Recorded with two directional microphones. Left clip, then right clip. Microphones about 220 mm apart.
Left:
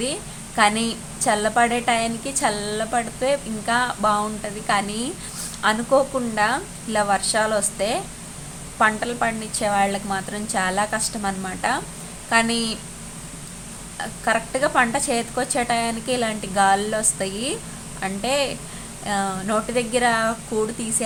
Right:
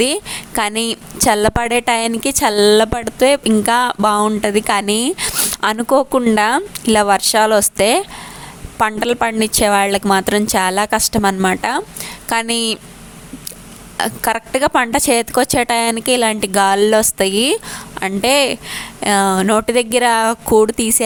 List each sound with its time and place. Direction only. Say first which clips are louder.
0.0 s a woman's voice: right 11 dB; 50° right (ahead or behind)
13.9 s a woman's voice: right 5 dB; 50° right (ahead or behind)